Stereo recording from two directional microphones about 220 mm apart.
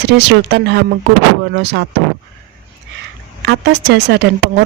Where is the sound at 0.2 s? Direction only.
50° right (ahead or behind).